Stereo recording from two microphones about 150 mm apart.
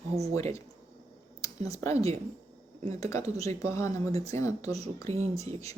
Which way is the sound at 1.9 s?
45° right (ahead or behind).